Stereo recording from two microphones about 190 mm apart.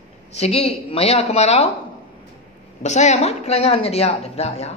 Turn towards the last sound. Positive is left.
turn(degrees=35)  # may be behind; listen again after turning